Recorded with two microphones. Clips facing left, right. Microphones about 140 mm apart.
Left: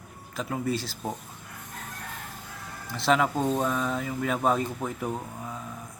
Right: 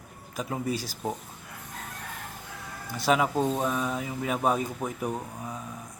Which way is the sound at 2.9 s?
10° right (ahead or behind).